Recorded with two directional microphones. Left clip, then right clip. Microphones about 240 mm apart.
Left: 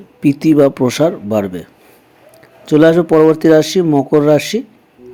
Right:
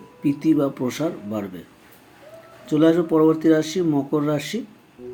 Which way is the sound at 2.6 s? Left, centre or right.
Left.